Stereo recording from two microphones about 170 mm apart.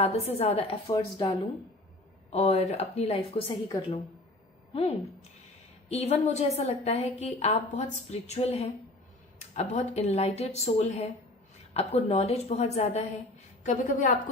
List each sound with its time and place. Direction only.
0.0 s a woman's voice: 35° left (ahead or behind)
0.8 s speech: 25° left (ahead or behind)
2.3 s a woman's voice: 40° left (ahead or behind)
5.9 s a woman's voice: 40° left (ahead or behind)